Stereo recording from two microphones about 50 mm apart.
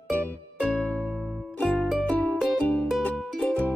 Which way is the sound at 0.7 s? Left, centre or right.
Left.